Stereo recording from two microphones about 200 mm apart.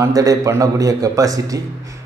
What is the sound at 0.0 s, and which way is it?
A man's voice, 20° right (ahead or behind).